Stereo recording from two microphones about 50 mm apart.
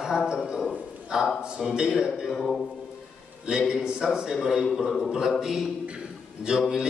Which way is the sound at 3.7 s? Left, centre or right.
Centre.